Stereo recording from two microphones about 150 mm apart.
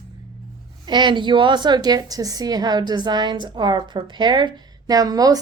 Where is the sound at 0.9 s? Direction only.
30° right (ahead or behind).